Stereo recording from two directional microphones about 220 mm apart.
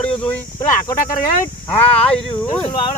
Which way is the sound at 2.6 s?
20° left (ahead or behind).